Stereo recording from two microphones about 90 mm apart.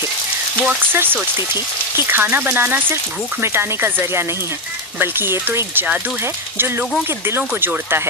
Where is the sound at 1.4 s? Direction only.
50° left (ahead or behind).